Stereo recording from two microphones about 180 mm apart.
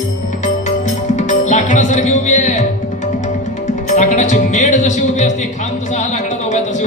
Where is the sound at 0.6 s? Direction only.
40° left (ahead or behind).